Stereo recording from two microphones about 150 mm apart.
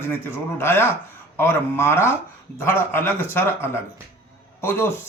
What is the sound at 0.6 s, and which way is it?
Speech, 15° left (ahead or behind).